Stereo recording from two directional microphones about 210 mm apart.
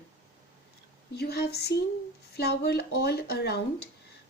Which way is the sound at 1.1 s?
50° left (ahead or behind).